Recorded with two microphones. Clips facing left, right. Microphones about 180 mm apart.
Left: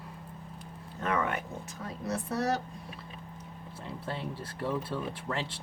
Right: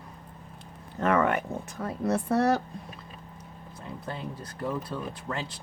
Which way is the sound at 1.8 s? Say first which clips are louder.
Right 7 dB; 55° right (ahead or behind).